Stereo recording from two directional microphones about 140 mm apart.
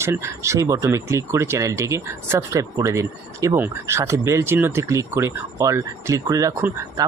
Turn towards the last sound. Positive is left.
turn(degrees=-20)  # may be behind; listen again after turning